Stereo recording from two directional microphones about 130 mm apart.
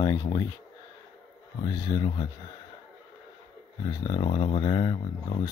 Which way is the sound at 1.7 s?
35° left (ahead or behind).